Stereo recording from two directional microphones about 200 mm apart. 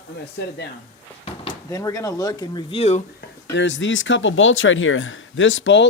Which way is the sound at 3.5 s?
65° left (ahead or behind).